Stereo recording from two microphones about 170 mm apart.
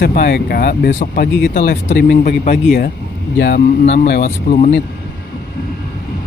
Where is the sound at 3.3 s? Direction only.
85° left.